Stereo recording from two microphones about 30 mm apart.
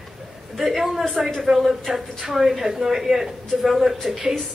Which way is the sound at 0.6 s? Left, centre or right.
Centre.